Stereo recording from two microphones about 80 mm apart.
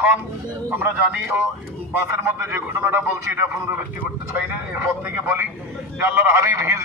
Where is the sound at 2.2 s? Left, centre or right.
Right.